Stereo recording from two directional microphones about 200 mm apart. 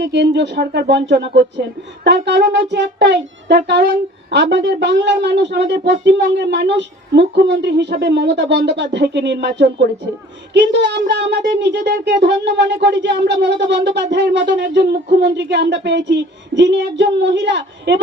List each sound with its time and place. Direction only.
0.0 s speech: 60° right (ahead or behind)